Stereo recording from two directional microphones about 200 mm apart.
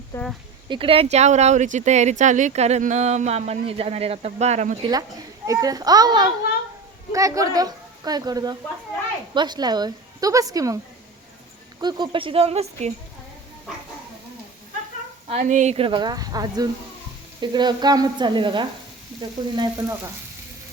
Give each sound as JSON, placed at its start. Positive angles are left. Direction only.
{"t": 0.1, "sound": "speech", "side_deg": 15}
{"t": 0.7, "sound": "speech", "side_deg": -25}
{"t": 5.5, "sound": "a woman's voice", "side_deg": -15}
{"t": 11.8, "sound": "a woman's voice", "side_deg": -20}
{"t": 15.3, "sound": "a woman's voice", "side_deg": -35}